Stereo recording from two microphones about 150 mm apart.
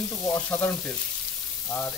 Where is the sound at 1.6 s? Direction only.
15° left (ahead or behind).